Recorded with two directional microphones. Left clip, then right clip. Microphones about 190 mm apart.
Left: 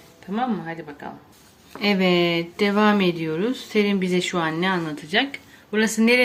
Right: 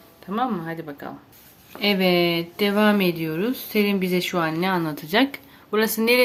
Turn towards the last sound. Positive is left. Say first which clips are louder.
# even
turn(degrees=-15)  # may be behind; listen again after turning